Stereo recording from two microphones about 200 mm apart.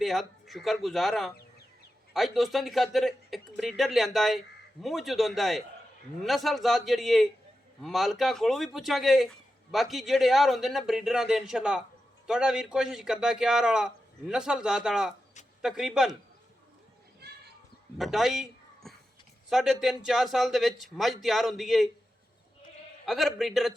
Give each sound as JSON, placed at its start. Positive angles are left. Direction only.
{"t": 0.0, "sound": "speech", "side_deg": 0}
{"t": 17.9, "sound": "speech", "side_deg": 0}
{"t": 23.0, "sound": "speech", "side_deg": 0}